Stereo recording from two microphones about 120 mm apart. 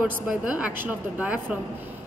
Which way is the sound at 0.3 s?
10° right (ahead or behind).